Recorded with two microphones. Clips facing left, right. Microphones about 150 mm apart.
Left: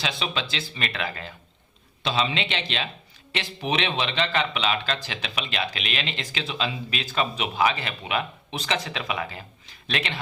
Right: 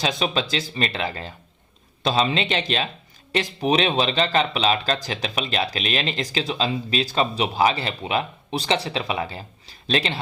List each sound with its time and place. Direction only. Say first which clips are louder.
0.0 s speech: right 6 dB; 40° right (ahead or behind)